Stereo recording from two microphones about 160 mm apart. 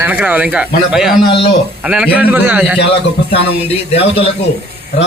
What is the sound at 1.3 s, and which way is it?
Speech, 35° left (ahead or behind).